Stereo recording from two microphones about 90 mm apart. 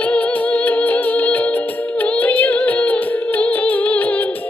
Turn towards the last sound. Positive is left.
turn(degrees=15)  # may be behind; listen again after turning